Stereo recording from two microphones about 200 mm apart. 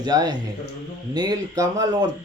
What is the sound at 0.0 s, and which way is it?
Speech, 20° right (ahead or behind).